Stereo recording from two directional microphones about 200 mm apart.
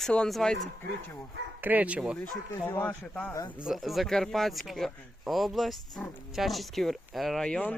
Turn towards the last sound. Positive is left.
turn(degrees=5)  # may be behind; listen again after turning